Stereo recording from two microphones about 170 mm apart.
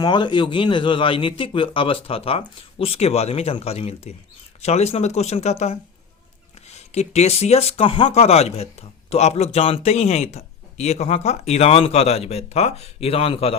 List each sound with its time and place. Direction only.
0.0 s speech: 25° left (ahead or behind)